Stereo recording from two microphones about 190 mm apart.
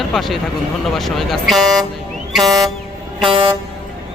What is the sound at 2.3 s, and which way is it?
Vehicle, centre (ahead or behind).